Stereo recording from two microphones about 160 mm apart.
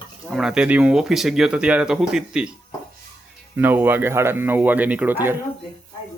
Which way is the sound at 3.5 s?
10° right (ahead or behind).